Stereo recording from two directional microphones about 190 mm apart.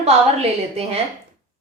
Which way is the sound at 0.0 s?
35° right (ahead or behind).